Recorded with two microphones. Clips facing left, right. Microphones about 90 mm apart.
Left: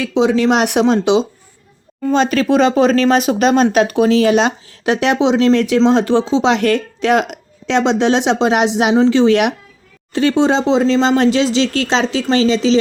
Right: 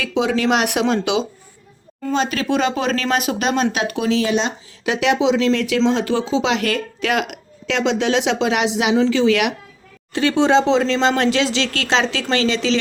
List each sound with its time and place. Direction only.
0.0 s speech: 25° left (ahead or behind); by 4.5 s 60° left (ahead or behind)
4.9 s speech: 40° left (ahead or behind)
10.7 s speech: 20° left (ahead or behind)